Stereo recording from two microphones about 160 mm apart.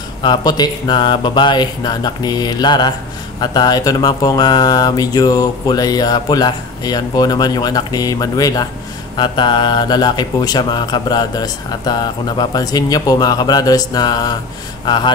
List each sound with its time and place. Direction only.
0.2 s speech: 25° left (ahead or behind)